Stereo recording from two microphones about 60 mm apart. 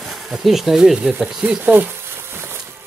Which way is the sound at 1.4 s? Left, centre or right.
Right.